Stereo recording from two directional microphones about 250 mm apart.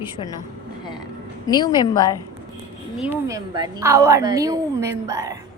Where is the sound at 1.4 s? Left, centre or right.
Centre.